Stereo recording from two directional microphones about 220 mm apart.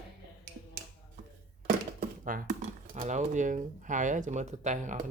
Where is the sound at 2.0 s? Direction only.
40° right (ahead or behind).